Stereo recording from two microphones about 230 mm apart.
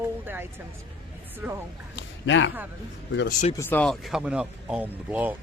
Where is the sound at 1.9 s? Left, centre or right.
Left.